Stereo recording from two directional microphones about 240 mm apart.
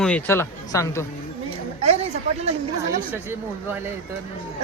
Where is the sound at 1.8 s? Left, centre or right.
Right.